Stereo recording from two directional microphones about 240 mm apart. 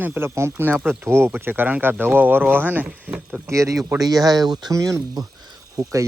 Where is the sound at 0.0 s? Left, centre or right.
Centre.